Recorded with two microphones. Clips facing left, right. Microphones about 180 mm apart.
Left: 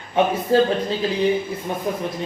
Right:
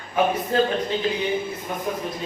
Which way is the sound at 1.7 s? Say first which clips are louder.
Left 3 dB; 30° left (ahead or behind).